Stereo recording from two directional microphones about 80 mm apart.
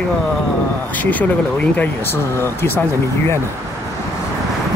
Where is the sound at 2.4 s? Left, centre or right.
Left.